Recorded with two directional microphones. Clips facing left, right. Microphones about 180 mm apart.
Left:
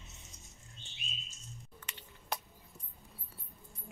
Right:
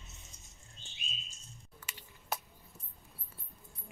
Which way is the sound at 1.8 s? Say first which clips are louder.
Left 1 dB; 10° right (ahead or behind).